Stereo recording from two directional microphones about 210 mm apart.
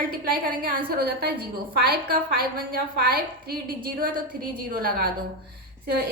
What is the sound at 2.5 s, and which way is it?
A woman's voice, 45° right (ahead or behind).